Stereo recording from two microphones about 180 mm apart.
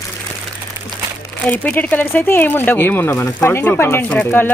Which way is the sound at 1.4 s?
10° left (ahead or behind).